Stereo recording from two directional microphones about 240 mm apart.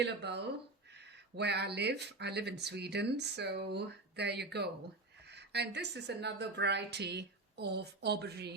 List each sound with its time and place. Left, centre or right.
0.0 s speech: right